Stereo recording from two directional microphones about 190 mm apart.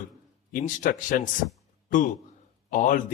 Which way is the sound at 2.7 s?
45° left (ahead or behind).